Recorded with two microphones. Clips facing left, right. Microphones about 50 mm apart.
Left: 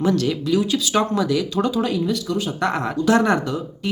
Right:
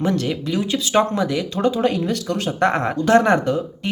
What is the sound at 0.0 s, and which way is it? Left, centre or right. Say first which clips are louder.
Speech: left 1 dB; right.